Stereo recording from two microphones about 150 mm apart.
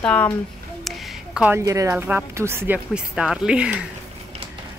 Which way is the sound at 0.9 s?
Centre (ahead or behind).